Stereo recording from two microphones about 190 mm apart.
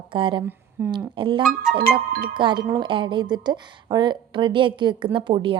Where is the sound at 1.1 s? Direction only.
25° right (ahead or behind).